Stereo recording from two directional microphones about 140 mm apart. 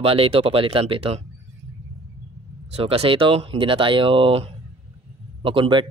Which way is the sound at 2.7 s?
45° right (ahead or behind).